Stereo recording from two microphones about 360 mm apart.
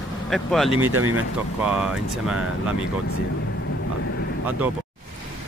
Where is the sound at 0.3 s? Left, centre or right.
Centre.